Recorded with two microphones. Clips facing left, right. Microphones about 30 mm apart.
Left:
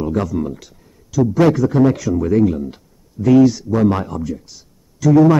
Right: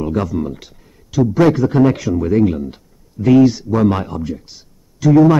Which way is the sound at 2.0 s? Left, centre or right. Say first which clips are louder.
Even; centre.